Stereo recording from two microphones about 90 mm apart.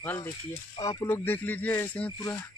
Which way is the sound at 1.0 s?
25° left (ahead or behind).